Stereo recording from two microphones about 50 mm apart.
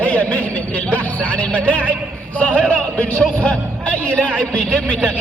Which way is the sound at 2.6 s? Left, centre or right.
Left.